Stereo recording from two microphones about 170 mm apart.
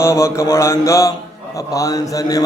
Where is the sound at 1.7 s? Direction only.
20° left (ahead or behind).